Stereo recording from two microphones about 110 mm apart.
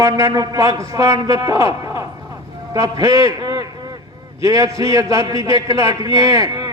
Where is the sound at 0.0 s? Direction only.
30° right (ahead or behind).